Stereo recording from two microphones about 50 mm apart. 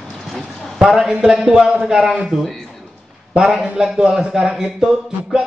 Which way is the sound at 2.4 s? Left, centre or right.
Centre.